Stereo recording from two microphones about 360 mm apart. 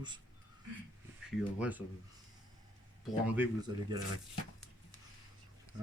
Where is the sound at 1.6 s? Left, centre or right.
Centre.